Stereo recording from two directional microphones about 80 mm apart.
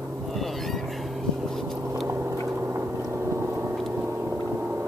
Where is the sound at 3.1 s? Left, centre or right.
Right.